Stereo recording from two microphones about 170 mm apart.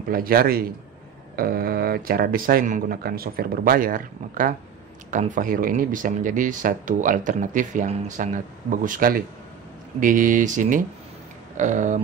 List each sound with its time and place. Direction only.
0.1 s speech: 60° right (ahead or behind)